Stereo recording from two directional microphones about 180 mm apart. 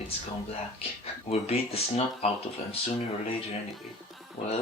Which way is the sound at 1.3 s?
35° left (ahead or behind).